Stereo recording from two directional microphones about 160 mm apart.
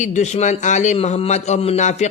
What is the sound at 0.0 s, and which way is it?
Speech, 45° left (ahead or behind).